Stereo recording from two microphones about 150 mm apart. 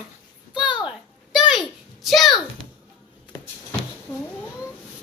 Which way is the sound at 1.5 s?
Centre (ahead or behind).